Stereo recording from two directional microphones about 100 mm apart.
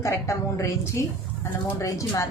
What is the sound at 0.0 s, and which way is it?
A woman's voice, 30° left (ahead or behind).